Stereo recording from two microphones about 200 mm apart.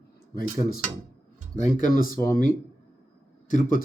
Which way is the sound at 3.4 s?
40° left (ahead or behind).